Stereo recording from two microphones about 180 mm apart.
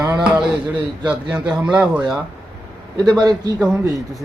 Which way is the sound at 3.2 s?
20° right (ahead or behind).